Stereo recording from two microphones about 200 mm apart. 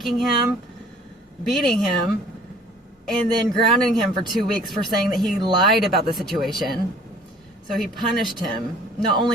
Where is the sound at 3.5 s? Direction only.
Centre (ahead or behind).